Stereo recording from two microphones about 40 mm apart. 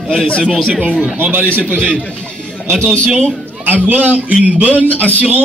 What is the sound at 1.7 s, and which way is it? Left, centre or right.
Speech, left.